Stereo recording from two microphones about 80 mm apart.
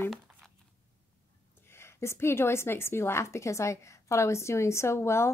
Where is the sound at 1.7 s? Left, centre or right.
Left.